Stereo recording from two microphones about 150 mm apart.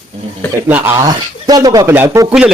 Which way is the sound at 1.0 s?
25° right (ahead or behind).